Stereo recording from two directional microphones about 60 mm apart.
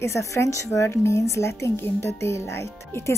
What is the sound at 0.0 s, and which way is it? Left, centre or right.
A woman's voice, left.